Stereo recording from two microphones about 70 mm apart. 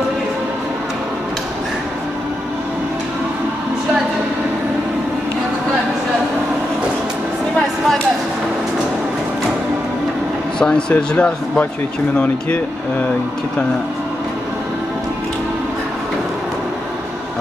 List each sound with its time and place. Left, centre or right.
10.6 s speech: centre